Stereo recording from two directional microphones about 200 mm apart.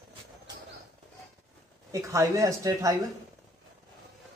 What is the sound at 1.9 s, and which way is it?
Speech, 15° right (ahead or behind).